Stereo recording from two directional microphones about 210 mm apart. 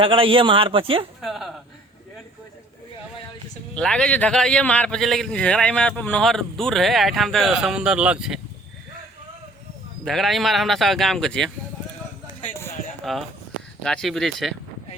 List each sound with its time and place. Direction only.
0.0 s a man's voice: 25° right (ahead or behind)
1.2 s a man's voice: centre (ahead or behind)
3.8 s a man's voice: 5° left (ahead or behind)
10.0 s a man's voice: centre (ahead or behind)
13.1 s a man's voice: centre (ahead or behind)